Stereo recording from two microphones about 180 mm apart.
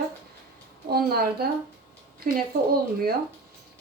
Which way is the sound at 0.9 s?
60° right (ahead or behind).